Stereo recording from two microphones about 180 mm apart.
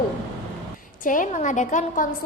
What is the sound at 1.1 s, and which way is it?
A woman's voice, 45° left (ahead or behind).